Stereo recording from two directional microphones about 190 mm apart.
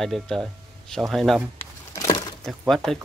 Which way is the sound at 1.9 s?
20° left (ahead or behind).